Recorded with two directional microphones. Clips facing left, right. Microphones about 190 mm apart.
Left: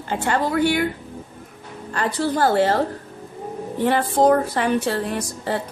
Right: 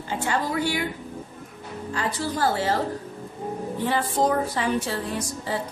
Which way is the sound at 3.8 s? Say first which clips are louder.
Left 7 dB; 60° left (ahead or behind).